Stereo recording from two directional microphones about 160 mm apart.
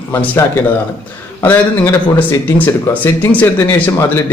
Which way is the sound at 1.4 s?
10° left (ahead or behind).